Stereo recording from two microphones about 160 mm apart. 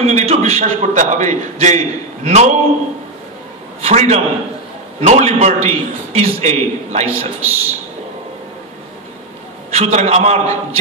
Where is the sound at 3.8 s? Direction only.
45° right (ahead or behind).